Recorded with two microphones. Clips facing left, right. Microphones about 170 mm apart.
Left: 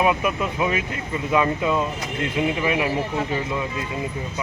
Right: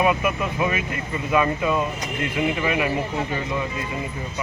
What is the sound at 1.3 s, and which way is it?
Speech, 20° left (ahead or behind).